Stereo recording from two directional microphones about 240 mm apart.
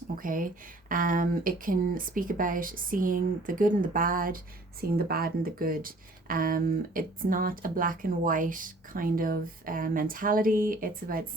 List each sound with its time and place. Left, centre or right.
0.2 s speech: right